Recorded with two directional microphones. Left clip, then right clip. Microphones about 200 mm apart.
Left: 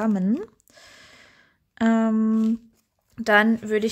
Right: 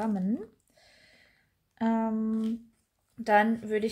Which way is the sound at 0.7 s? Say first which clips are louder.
Left 11 dB; 35° left (ahead or behind).